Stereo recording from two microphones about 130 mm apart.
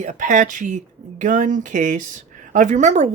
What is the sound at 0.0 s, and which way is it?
Speech, 70° right (ahead or behind).